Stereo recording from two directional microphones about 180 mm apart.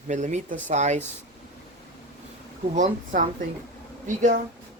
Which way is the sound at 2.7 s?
45° right (ahead or behind).